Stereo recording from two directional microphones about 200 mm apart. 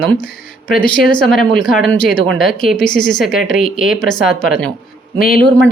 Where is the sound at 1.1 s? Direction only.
5° left (ahead or behind).